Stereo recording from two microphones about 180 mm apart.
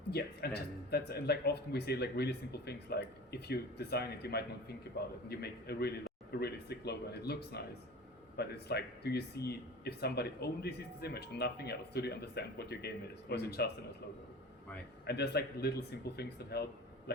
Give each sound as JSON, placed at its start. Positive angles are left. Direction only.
{"t": 0.1, "sound": "speech", "side_deg": 60}
{"t": 15.0, "sound": "speech", "side_deg": 65}